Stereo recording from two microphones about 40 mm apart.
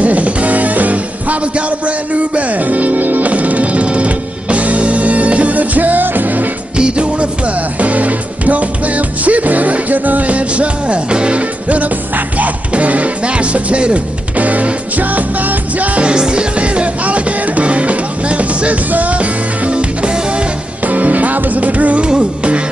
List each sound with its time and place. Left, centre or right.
0.0 s music: right
6.8 s music: right
7.8 s music: right
16.1 s music: right
20.8 s music: right
22.0 s music: right